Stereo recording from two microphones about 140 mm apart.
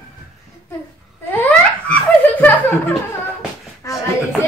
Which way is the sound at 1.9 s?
10° left (ahead or behind).